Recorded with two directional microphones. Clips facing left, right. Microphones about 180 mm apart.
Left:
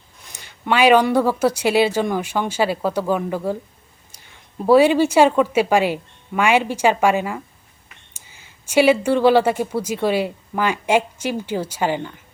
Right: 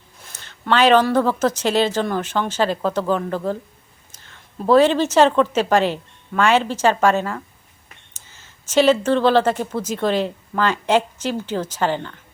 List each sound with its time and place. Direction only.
0.3 s a woman's voice: 15° left (ahead or behind)